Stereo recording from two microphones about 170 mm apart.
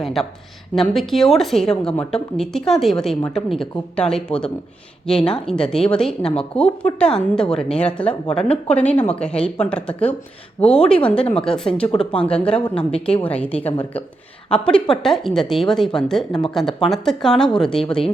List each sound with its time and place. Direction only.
0.0 s a woman's voice: centre (ahead or behind)
8.3 s a woman's voice: 35° left (ahead or behind)
8.8 s a woman's voice: 10° left (ahead or behind)
14.7 s a woman's voice: 5° left (ahead or behind)